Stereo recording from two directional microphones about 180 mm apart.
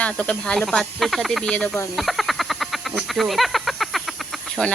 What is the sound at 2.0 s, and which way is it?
Frog, centre (ahead or behind).